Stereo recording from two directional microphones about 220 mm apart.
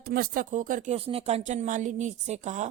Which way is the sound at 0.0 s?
40° right (ahead or behind).